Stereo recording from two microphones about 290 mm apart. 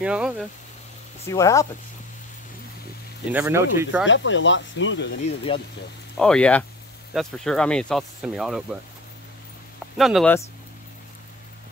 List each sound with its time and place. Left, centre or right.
0.0 s speech: centre
1.2 s speech: centre
3.3 s speech: centre
4.0 s speech: left
5.5 s speech: centre
6.1 s speech: centre
9.9 s speech: centre